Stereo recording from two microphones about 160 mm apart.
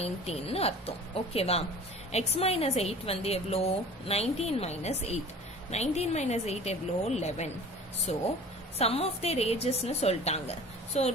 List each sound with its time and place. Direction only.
0.0 s a woman's voice: 40° left (ahead or behind)